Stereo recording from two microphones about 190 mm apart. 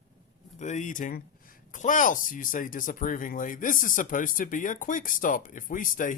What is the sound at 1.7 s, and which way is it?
Speech, 45° left (ahead or behind).